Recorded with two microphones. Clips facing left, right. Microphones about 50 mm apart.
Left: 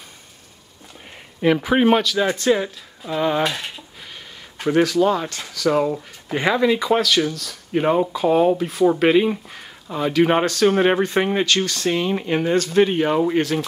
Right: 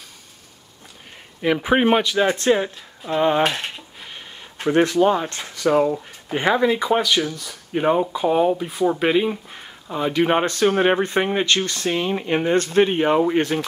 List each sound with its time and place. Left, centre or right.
1.6 s speech: centre
5.7 s speech: centre
6.3 s speech: right
7.7 s speech: centre
8.1 s speech: centre
8.4 s speech: centre
9.5 s speech: centre
10.4 s speech: right
10.7 s speech: centre
11.4 s speech: right
11.9 s speech: centre
12.5 s speech: right
12.8 s speech: centre